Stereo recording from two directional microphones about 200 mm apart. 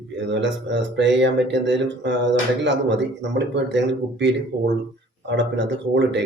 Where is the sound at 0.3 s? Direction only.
60° right (ahead or behind).